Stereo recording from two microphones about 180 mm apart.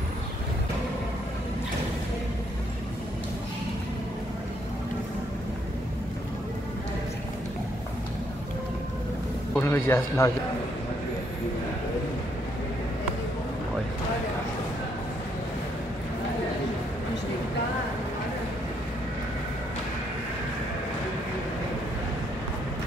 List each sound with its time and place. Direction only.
9.5 s a man's voice: 15° left (ahead or behind)